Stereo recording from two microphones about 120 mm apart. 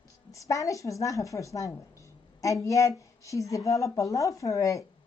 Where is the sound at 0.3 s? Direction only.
25° left (ahead or behind).